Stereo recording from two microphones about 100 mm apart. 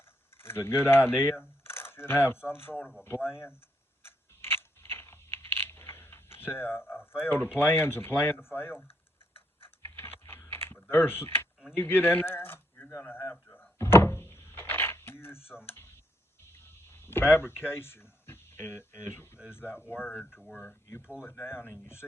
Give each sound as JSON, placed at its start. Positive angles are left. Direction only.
{"t": 0.3, "sound": "speech", "side_deg": 25}
{"t": 4.0, "sound": "crunch", "side_deg": 25}
{"t": 7.2, "sound": "speech", "side_deg": 20}
{"t": 9.6, "sound": "typing", "side_deg": 25}
{"t": 10.9, "sound": "speech", "side_deg": 20}
{"t": 12.9, "sound": "door", "side_deg": 25}
{"t": 16.5, "sound": "a sound", "side_deg": 25}
{"t": 17.3, "sound": "speech", "side_deg": 20}